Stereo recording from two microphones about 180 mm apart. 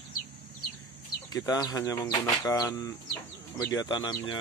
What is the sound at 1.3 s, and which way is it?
Speech, 20° left (ahead or behind).